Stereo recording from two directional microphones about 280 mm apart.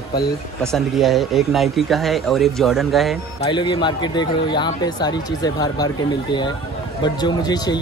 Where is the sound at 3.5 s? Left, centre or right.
Centre.